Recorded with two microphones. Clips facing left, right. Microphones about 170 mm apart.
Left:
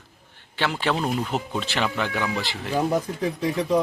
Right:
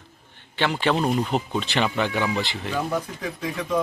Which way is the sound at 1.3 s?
Centre (ahead or behind).